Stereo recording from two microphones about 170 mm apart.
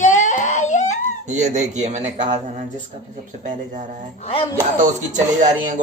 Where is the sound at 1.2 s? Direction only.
45° right (ahead or behind).